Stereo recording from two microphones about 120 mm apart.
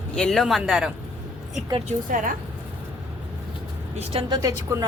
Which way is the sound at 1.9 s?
90° right.